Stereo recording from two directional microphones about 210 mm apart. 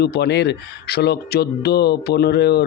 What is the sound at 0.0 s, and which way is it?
Speech, 55° left (ahead or behind).